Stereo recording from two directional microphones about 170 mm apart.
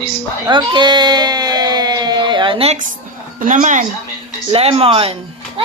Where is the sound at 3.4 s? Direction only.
45° right (ahead or behind).